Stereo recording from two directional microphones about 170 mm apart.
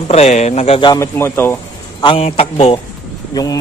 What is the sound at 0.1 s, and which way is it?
Speech, 40° left (ahead or behind).